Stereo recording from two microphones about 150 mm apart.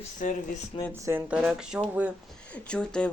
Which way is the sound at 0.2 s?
60° left (ahead or behind).